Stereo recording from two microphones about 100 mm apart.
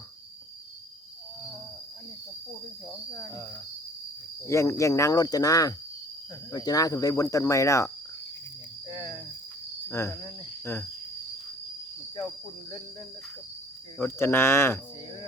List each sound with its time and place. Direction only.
4.4 s speech: 30° left (ahead or behind)
8.9 s speech: 40° left (ahead or behind)
9.9 s speech: 25° left (ahead or behind)
14.0 s speech: 20° left (ahead or behind)